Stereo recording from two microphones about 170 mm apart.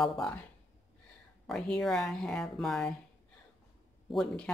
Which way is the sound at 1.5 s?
Centre (ahead or behind).